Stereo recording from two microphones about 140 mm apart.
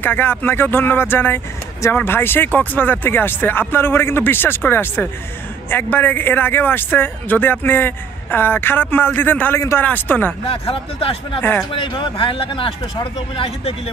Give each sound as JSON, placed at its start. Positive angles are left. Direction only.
{"t": 0.0, "sound": "speech", "side_deg": 15}
{"t": 10.5, "sound": "speech", "side_deg": 40}